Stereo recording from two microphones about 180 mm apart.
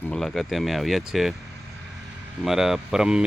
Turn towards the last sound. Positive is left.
turn(degrees=-5)  # may be behind; listen again after turning